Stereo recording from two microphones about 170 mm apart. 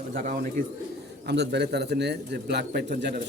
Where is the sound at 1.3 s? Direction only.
80° right.